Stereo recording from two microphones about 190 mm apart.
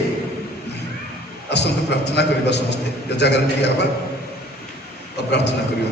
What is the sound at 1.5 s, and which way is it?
A man's voice, 60° left (ahead or behind).